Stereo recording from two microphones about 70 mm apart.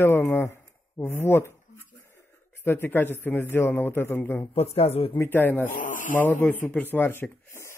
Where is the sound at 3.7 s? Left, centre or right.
Left.